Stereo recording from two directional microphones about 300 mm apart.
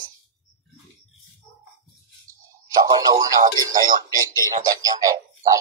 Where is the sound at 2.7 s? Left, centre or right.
Centre.